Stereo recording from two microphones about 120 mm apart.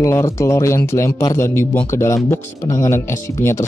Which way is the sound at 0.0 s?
25° left (ahead or behind).